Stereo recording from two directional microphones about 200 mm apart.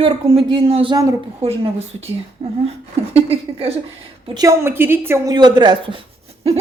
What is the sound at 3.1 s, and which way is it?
Speech, 30° right (ahead or behind).